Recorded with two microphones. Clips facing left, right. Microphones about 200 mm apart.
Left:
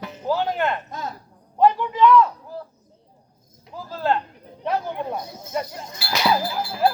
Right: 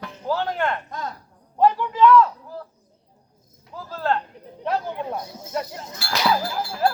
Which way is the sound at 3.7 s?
5° left (ahead or behind).